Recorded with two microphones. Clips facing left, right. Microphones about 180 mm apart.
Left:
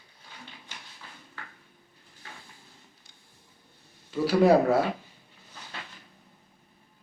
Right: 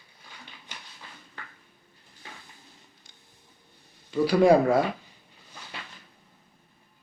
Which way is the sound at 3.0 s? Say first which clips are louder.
Right 1 dB; 5° left (ahead or behind).